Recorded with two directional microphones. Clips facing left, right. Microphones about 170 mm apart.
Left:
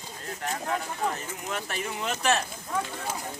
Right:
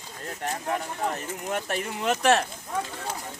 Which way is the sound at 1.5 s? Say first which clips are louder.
Right 3 dB; 55° right (ahead or behind).